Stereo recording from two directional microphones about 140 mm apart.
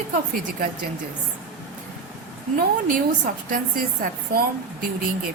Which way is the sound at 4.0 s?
80° right.